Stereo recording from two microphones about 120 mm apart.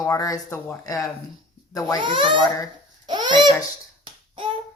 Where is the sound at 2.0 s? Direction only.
45° right (ahead or behind).